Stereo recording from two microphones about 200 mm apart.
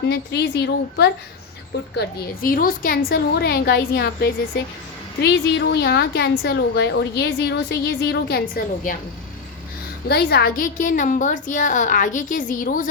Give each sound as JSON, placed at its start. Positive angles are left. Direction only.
{"t": 0.0, "sound": "a woman's voice", "side_deg": 60}
{"t": 10.1, "sound": "a woman's voice", "side_deg": 50}